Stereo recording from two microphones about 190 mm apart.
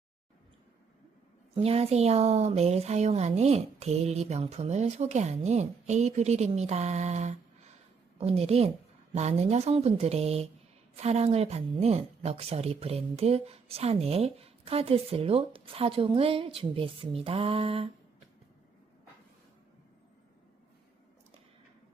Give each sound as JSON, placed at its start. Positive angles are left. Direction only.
{"t": 1.5, "sound": "speech", "side_deg": -30}